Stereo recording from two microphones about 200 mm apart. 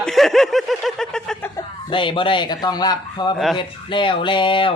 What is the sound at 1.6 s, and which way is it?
A man's voice, 25° left (ahead or behind).